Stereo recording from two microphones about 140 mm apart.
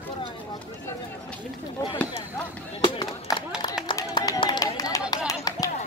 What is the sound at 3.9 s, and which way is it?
Run, 30° left (ahead or behind).